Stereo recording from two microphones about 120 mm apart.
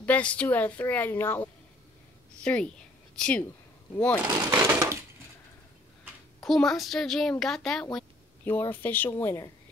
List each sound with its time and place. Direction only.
0.0 s a woman's voice: 10° left (ahead or behind)
4.5 s crushing: 25° right (ahead or behind)
6.4 s a woman's voice: 5° left (ahead or behind)
8.5 s speech: 20° left (ahead or behind)